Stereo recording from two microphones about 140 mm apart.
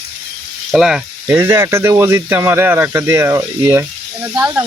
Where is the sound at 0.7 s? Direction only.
5° right (ahead or behind).